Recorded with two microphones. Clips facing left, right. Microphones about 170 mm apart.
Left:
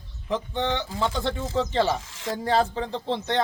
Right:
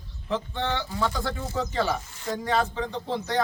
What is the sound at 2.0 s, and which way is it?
Speech, 90° left.